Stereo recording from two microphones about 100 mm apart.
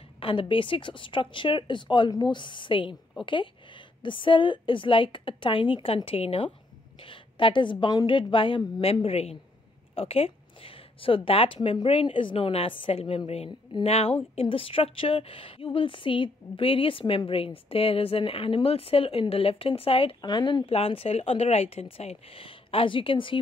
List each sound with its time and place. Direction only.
0.2 s speech: 65° left (ahead or behind)
6.0 s a woman's voice: 75° left (ahead or behind)
7.0 s a woman's voice: 60° left (ahead or behind)
8.1 s speech: 60° left (ahead or behind)
9.0 s a woman's voice: 90° left
9.9 s a woman's voice: 75° left (ahead or behind)
13.8 s a woman's voice: 90° left; by 20.2 s 70° left (ahead or behind)
20.2 s speech: 45° left (ahead or behind)
20.7 s a woman's voice: 75° left (ahead or behind)